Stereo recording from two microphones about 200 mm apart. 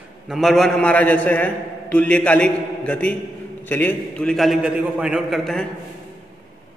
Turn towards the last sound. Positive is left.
turn(degrees=0)  # may be behind; listen again after turning